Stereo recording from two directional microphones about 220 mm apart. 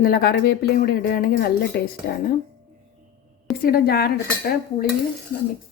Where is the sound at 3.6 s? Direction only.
40° left (ahead or behind).